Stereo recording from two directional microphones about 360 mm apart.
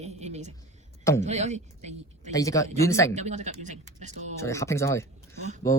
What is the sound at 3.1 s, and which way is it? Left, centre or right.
Speech, centre.